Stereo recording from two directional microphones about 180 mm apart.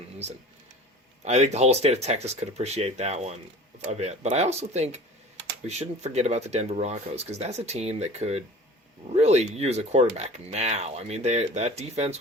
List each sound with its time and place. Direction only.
1.2 s speech: 40° right (ahead or behind)